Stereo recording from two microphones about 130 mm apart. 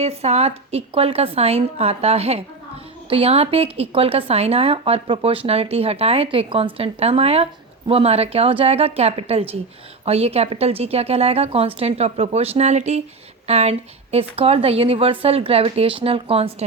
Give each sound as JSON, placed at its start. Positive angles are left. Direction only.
{"t": 0.0, "sound": "speech", "side_deg": -55}